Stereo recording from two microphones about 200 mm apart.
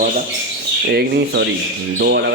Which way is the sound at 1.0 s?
55° right (ahead or behind).